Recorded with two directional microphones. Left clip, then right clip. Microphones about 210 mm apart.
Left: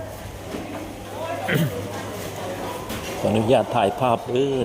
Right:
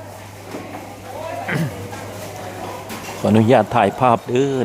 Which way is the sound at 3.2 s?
20° right (ahead or behind).